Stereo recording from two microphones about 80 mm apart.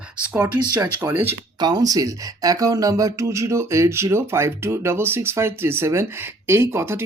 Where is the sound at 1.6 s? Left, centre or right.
Right.